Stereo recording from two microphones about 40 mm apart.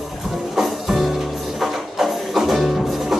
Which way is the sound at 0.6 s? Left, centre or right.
Centre.